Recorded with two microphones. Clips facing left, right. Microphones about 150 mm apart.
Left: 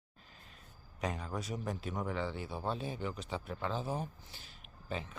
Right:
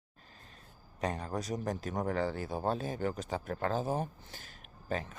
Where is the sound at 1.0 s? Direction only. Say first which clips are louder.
Right 3 dB; 35° right (ahead or behind).